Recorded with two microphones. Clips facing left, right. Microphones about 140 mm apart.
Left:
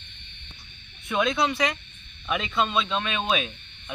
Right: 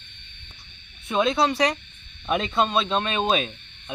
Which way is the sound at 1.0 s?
30° right (ahead or behind).